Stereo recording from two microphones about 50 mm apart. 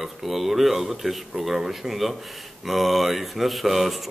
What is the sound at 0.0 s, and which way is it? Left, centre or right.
Speech, centre.